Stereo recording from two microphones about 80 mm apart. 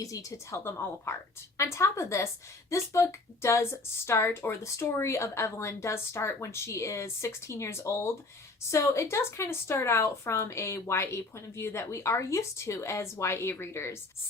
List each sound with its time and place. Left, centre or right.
0.0 s speech: left